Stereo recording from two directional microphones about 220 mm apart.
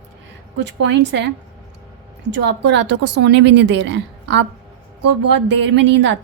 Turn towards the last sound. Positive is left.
turn(degrees=-55)  # may be behind; listen again after turning